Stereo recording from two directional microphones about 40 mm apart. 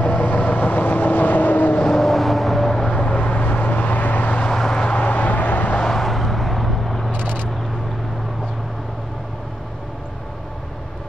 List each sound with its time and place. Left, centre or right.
0.0 s vehicle: left
1.9 s vehicle: centre
2.9 s vehicle: left
3.3 s vehicle: left
4.5 s vehicle: centre
4.8 s vehicle: left
5.8 s vehicle: centre
6.0 s vehicle: centre